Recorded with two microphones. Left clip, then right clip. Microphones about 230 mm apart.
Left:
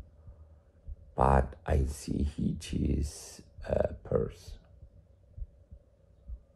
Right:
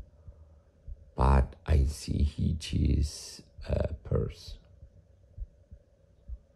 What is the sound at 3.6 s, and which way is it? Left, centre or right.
Speech, centre.